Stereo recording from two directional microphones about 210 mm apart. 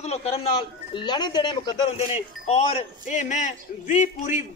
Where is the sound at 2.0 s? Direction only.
30° left (ahead or behind).